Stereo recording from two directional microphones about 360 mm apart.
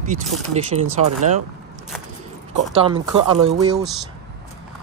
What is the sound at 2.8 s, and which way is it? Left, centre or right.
Speech, centre.